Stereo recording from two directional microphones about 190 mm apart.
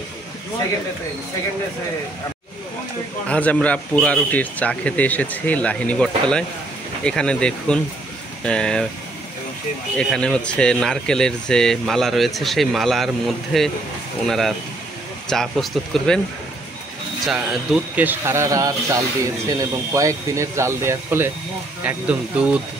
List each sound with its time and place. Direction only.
3.3 s speech: 5° left (ahead or behind)
9.9 s speech: 5° left (ahead or behind)
17.9 s speech: 10° right (ahead or behind)